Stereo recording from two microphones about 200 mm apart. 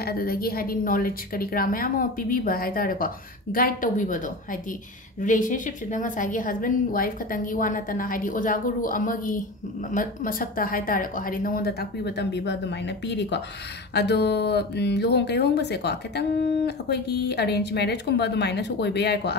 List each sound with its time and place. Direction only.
0.0 s a woman's voice: 45° left (ahead or behind)